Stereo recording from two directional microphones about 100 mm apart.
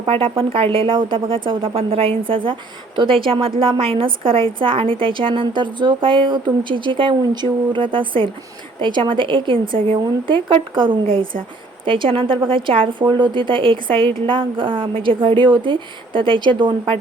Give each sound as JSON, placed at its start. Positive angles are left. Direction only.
{"t": 0.0, "sound": "speech", "side_deg": -65}